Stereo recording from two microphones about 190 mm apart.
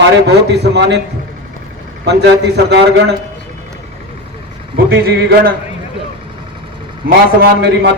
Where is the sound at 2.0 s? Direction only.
65° right (ahead or behind).